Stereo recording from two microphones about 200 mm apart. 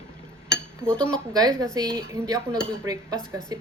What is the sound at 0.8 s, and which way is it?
Speech, 5° left (ahead or behind).